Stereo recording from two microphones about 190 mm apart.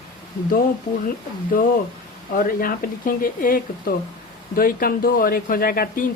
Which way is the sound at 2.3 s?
50° left (ahead or behind).